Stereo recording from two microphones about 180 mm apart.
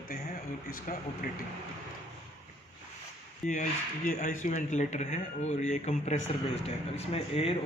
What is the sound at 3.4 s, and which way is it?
A man's voice, 45° left (ahead or behind).